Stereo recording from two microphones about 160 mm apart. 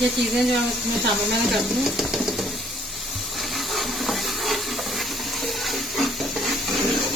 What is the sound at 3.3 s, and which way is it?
Stir, centre (ahead or behind).